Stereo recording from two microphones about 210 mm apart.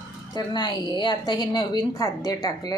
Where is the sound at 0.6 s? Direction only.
20° left (ahead or behind).